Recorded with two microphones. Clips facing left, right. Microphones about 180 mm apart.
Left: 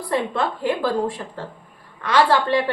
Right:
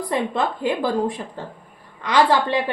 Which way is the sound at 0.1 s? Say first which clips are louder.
Left 1 dB; 15° right (ahead or behind).